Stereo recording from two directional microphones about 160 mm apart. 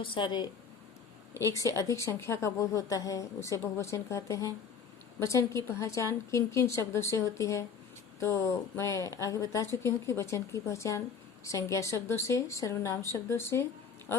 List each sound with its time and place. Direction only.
0.0 s speech: 30° left (ahead or behind)
1.3 s a woman's voice: 20° left (ahead or behind)